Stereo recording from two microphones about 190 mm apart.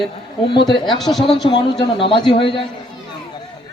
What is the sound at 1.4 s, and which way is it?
Speech, 25° left (ahead or behind).